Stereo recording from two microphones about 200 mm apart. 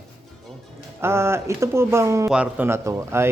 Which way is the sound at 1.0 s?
15° right (ahead or behind).